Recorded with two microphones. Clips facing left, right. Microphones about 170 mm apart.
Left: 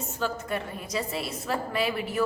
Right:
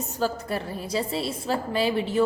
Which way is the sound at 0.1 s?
35° right (ahead or behind).